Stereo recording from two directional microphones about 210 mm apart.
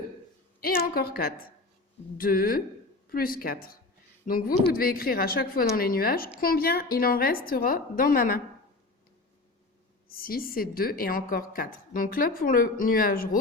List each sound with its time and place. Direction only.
0.6 s a woman's voice: 45° left (ahead or behind)
10.1 s a woman's voice: 45° left (ahead or behind)